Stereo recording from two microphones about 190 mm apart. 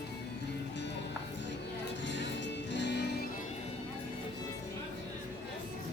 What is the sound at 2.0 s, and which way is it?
Music, 70° left (ahead or behind).